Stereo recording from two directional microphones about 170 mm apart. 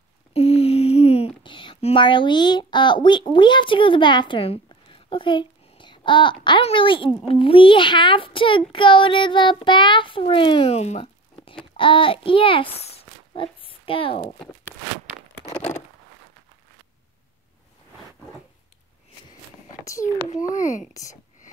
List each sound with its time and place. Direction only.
0.3 s a sound: 35° left (ahead or behind)
6.4 s a child's voice: 30° left (ahead or behind)
19.8 s a child's voice: 20° left (ahead or behind)
20.2 s a child's voice: 45° left (ahead or behind)